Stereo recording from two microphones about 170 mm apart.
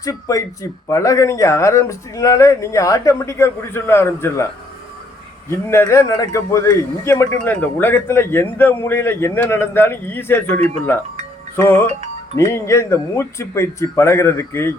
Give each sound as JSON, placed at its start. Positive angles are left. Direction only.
{"t": 0.0, "sound": "a man's voice", "side_deg": 20}
{"t": 5.5, "sound": "a man's voice", "side_deg": 15}